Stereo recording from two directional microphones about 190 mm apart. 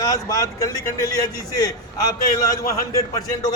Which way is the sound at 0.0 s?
15° left (ahead or behind).